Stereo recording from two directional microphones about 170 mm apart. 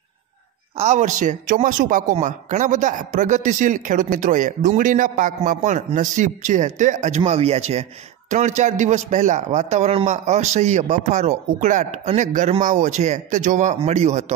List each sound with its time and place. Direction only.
0.7 s speech: 45° right (ahead or behind)